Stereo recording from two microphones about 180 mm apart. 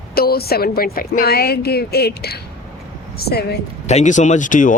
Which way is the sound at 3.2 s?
65° left (ahead or behind).